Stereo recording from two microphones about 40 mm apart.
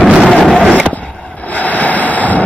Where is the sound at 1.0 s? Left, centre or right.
Left.